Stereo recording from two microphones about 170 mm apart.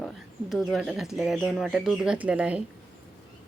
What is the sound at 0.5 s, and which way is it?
A woman's voice, centre (ahead or behind).